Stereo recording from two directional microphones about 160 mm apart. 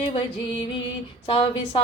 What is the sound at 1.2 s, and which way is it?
Mantra, 35° left (ahead or behind).